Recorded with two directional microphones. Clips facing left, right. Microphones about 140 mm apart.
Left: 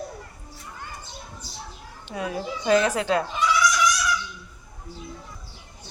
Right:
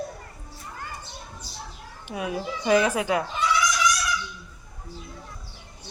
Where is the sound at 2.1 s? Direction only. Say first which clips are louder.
Even; 15° right (ahead or behind).